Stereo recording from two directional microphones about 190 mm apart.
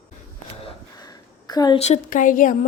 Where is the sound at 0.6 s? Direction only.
25° left (ahead or behind).